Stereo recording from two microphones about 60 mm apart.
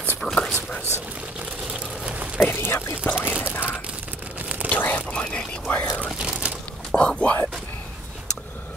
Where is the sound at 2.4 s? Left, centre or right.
Left.